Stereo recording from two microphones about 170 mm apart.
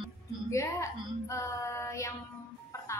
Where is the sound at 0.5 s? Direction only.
15° left (ahead or behind).